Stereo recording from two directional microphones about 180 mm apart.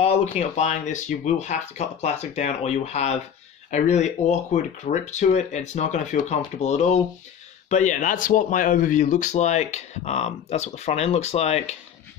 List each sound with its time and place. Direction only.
0.0 s speech: 40° left (ahead or behind)